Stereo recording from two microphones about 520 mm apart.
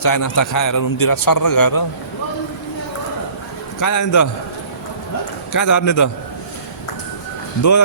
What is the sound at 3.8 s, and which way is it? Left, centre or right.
Speech, left.